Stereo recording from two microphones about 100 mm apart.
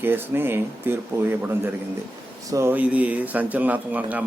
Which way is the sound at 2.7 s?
15° right (ahead or behind).